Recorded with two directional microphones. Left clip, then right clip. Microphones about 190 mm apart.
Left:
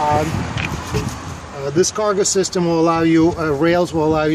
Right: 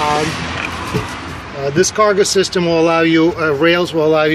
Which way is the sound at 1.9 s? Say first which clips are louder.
Right 5 dB; 55° left (ahead or behind).